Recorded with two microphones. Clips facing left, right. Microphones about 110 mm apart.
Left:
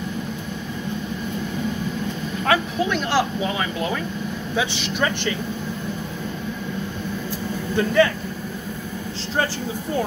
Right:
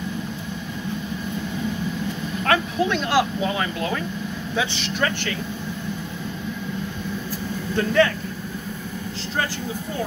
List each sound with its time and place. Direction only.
2.4 s vehicle: 5° left (ahead or behind)
4.6 s speech: 15° left (ahead or behind)
7.7 s speech: 5° left (ahead or behind)